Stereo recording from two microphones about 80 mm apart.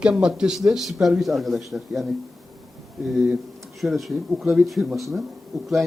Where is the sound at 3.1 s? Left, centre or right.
Centre.